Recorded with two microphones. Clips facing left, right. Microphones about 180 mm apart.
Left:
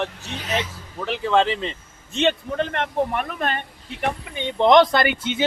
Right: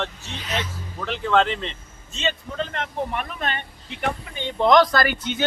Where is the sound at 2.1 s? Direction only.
60° left (ahead or behind).